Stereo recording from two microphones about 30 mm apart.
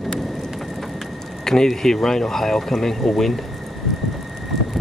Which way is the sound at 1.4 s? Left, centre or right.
Centre.